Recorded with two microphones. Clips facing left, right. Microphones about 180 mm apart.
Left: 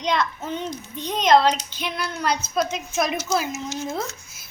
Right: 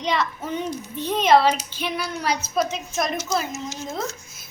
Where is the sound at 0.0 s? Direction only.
5° right (ahead or behind).